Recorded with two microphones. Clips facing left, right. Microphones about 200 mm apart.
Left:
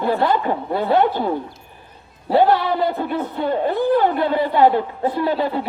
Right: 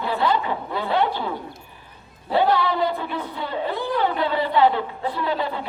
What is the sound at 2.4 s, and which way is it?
A woman's voice, 50° left (ahead or behind).